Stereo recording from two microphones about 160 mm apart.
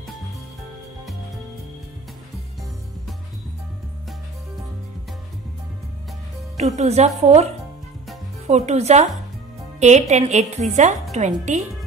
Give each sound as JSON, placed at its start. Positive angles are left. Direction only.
{"t": 6.5, "sound": "a woman's voice", "side_deg": -45}
{"t": 8.5, "sound": "a woman's voice", "side_deg": -45}